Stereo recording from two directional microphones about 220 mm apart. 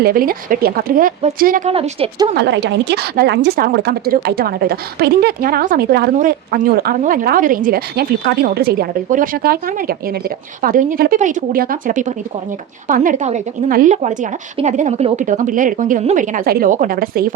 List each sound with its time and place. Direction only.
0.0 s speech: 40° right (ahead or behind)
2.3 s a woman's voice: 50° right (ahead or behind)